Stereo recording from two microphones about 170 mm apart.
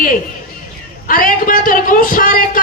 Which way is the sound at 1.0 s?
55° left (ahead or behind).